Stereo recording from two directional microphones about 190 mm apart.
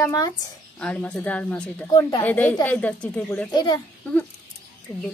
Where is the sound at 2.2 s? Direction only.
10° left (ahead or behind).